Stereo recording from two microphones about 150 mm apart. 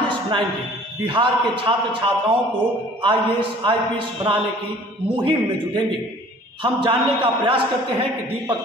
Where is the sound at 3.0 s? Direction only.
35° right (ahead or behind).